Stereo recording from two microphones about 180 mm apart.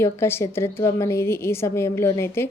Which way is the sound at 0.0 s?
15° left (ahead or behind).